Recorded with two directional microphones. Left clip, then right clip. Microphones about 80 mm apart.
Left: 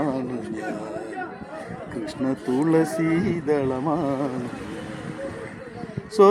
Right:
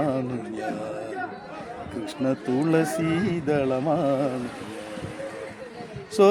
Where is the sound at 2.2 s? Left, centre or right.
Centre.